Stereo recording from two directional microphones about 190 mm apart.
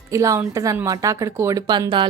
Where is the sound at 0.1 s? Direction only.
15° right (ahead or behind).